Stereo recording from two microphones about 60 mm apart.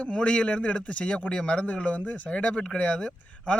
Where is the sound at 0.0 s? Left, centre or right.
Centre.